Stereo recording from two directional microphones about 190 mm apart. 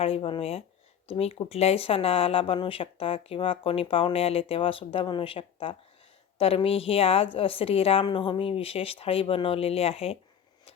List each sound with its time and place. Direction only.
0.0 s a woman's voice: 30° left (ahead or behind)